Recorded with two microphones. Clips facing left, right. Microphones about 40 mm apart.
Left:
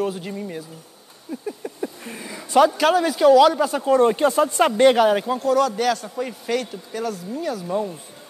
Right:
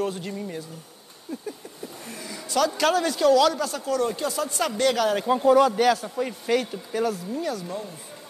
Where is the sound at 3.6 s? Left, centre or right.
Left.